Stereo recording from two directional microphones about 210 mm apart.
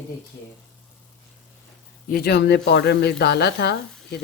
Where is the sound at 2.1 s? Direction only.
50° left (ahead or behind).